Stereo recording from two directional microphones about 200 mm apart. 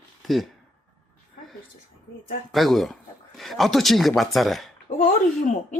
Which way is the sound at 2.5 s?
Centre (ahead or behind).